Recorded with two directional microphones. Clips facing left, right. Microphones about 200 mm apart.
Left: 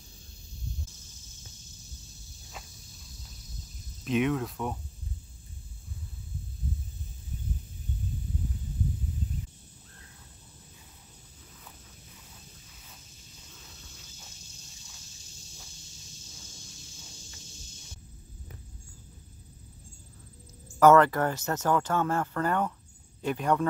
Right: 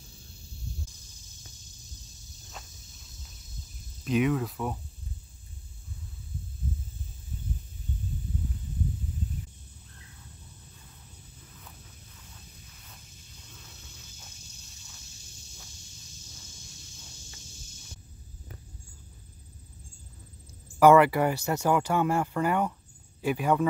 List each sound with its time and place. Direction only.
4.0 s speech: centre (ahead or behind)
20.8 s speech: 10° right (ahead or behind)